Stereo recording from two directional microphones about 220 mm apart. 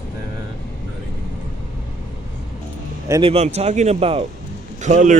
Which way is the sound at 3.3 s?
30° right (ahead or behind).